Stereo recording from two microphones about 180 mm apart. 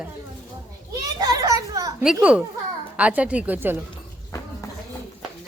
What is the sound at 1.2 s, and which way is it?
Speech, 20° right (ahead or behind).